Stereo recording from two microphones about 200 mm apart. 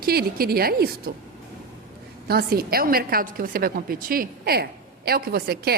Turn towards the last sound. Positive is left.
turn(degrees=-50)  # may be behind; listen again after turning